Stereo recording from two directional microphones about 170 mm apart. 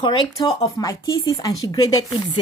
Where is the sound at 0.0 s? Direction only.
30° left (ahead or behind).